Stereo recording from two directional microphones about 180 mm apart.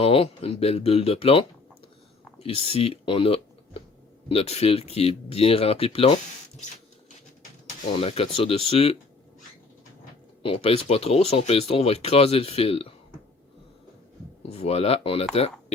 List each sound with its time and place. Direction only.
0.0 s speech: 30° left (ahead or behind)
7.9 s speech: 35° left (ahead or behind)
10.4 s speech: 30° left (ahead or behind)
14.5 s speech: 35° left (ahead or behind)